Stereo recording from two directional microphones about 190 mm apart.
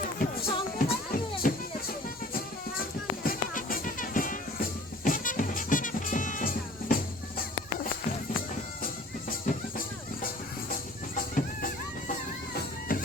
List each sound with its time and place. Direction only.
0.2 s music: 50° left (ahead or behind)
3.2 s music: 45° left (ahead or behind)
10.7 s music: 45° left (ahead or behind)